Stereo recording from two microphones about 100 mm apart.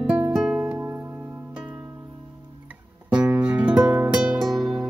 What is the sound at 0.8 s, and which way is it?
Music, 25° right (ahead or behind).